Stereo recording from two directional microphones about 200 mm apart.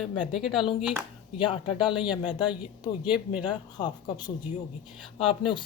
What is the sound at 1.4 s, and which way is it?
Speech, 25° left (ahead or behind).